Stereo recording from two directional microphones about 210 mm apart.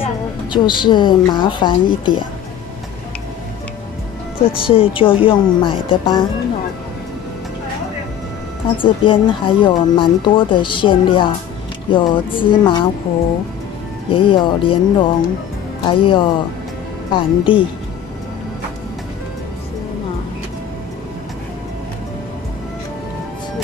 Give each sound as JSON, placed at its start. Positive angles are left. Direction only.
{"t": 0.0, "sound": "a woman's voice", "side_deg": 20}
{"t": 4.4, "sound": "speech", "side_deg": 25}
{"t": 8.8, "sound": "speech", "side_deg": 25}
{"t": 14.1, "sound": "speech", "side_deg": 25}